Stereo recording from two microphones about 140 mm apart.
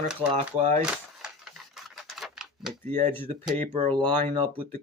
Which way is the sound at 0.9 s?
5° right (ahead or behind).